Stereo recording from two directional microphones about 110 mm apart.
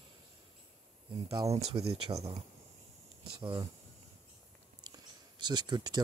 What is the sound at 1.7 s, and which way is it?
Speech, 65° right (ahead or behind).